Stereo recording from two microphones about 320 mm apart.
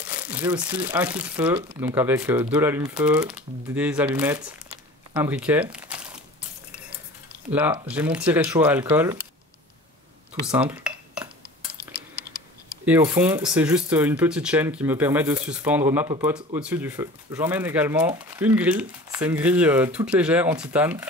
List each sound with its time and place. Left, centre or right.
0.1 s speech: centre
5.1 s crumpling: centre
7.5 s speech: centre
10.4 s cutlery: centre
12.8 s speech: centre